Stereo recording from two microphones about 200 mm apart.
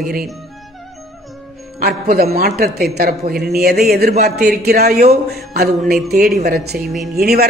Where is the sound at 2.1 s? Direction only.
50° right (ahead or behind).